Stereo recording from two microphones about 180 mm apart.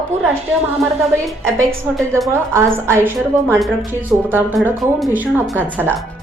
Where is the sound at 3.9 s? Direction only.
10° right (ahead or behind).